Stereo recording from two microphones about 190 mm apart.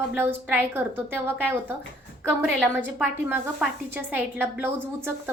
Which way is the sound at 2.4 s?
5° left (ahead or behind).